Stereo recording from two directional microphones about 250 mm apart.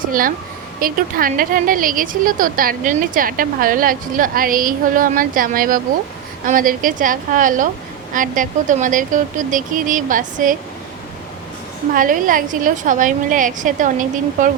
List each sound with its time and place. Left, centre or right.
0.0 s a woman's voice: right
11.9 s a woman's voice: right